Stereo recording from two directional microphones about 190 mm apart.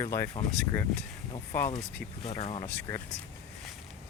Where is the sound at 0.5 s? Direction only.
5° left (ahead or behind).